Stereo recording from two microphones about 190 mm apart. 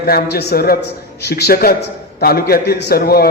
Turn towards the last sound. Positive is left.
turn(degrees=55)  # may be behind; listen again after turning